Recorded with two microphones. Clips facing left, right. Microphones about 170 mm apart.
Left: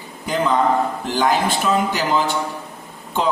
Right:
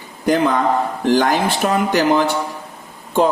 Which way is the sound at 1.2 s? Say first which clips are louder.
Right 1 dB; 60° right (ahead or behind).